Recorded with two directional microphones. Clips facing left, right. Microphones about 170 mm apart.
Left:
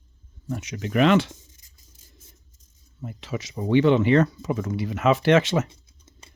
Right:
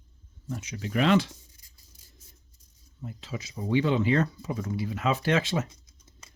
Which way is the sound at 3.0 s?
75° left (ahead or behind).